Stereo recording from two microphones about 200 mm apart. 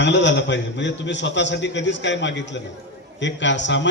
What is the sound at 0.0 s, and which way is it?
A man's voice, 65° left (ahead or behind).